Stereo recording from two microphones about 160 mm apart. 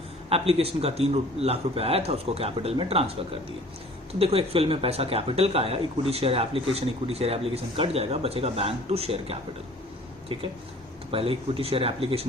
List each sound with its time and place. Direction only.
0.3 s speech: 40° right (ahead or behind)
4.2 s speech: 40° right (ahead or behind)
11.1 s speech: 35° right (ahead or behind)